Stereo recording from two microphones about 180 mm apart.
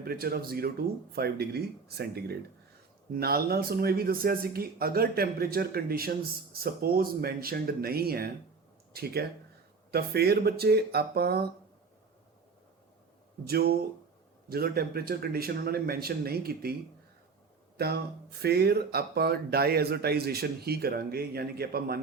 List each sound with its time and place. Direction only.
0.0 s speech: 60° right (ahead or behind)
13.4 s speech: 60° right (ahead or behind)
17.7 s speech: 60° right (ahead or behind)